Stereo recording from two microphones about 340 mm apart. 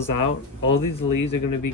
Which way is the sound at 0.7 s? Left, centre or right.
Left.